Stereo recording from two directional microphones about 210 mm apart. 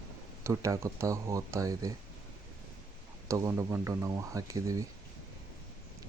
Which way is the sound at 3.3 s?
15° right (ahead or behind).